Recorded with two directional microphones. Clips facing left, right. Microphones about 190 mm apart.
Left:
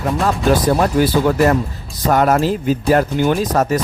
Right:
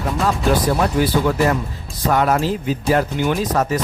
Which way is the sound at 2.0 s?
45° left (ahead or behind).